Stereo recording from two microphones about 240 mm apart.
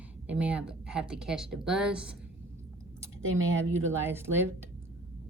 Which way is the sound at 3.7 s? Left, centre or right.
Centre.